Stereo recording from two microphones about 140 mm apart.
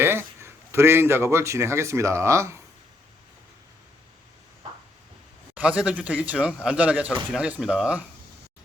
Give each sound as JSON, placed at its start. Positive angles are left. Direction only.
{"t": 0.0, "sound": "speech", "side_deg": -15}
{"t": 5.5, "sound": "speech", "side_deg": -10}